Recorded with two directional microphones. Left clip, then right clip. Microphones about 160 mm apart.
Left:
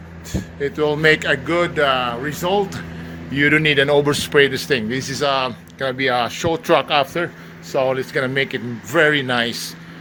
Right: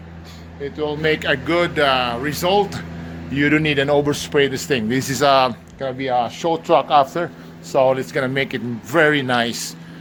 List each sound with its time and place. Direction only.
0.6 s speech: 45° left (ahead or behind)
1.2 s speech: centre (ahead or behind)
3.3 s speech: 5° left (ahead or behind)
4.9 s speech: 25° right (ahead or behind)
5.8 s speech: 15° left (ahead or behind); by 9.6 s 5° right (ahead or behind)